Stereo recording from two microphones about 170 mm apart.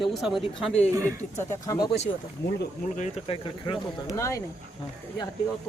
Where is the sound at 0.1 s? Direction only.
Centre (ahead or behind).